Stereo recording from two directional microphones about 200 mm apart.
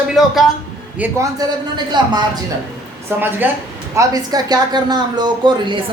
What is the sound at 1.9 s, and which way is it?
Speech, 20° right (ahead or behind).